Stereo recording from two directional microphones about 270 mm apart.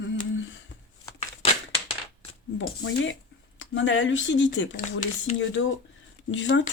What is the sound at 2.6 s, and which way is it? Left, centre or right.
Speech, left.